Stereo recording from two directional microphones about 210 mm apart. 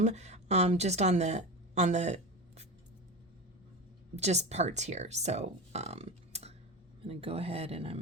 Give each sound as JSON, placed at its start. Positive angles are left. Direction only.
{"t": 0.0, "sound": "a woman's voice", "side_deg": -30}
{"t": 4.1, "sound": "speech", "side_deg": -30}